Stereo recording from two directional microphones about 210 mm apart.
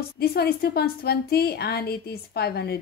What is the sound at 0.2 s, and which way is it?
Speech, 50° left (ahead or behind).